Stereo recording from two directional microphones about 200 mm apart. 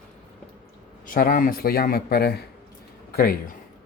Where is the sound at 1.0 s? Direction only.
45° left (ahead or behind).